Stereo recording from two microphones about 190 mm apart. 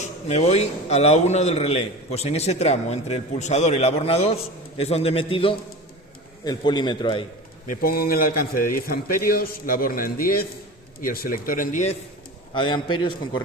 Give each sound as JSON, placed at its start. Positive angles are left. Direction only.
{"t": 0.0, "sound": "a man's voice", "side_deg": 35}
{"t": 7.7, "sound": "a man's voice", "side_deg": 50}
{"t": 12.5, "sound": "a man's voice", "side_deg": 25}